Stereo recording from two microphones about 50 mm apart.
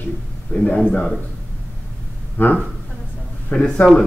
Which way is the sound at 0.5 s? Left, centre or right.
Left.